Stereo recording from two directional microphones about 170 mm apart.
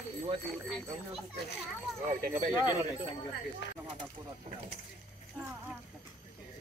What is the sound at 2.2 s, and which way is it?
Speech, 50° right (ahead or behind).